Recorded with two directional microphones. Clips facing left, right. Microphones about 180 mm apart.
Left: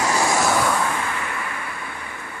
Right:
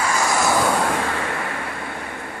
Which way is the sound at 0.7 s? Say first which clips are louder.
Right 3 dB; 55° right (ahead or behind).